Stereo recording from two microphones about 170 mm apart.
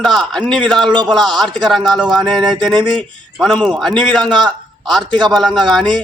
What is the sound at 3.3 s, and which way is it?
Speech, centre (ahead or behind).